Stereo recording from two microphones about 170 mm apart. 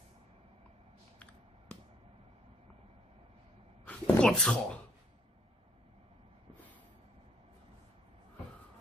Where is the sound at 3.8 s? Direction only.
5° left (ahead or behind).